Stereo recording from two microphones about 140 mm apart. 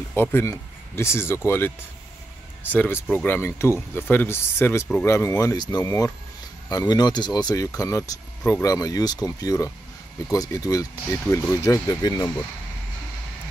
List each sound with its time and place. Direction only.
0.1 s speech: 15° left (ahead or behind)
2.7 s speech: 10° left (ahead or behind); by 12.3 s 25° left (ahead or behind)